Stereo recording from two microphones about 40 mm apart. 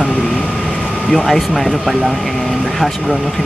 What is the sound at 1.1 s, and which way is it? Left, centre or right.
Speech, centre.